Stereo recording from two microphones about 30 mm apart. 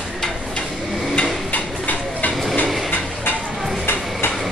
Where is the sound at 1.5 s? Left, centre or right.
Left.